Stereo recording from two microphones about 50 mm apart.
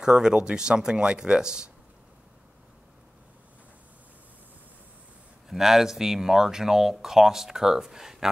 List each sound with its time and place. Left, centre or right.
0.0 s speech: centre
5.5 s speech: centre